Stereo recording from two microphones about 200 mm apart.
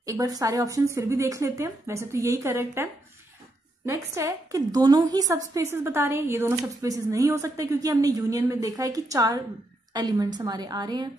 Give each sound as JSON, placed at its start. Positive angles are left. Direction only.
{"t": 0.0, "sound": "a woman's voice", "side_deg": -20}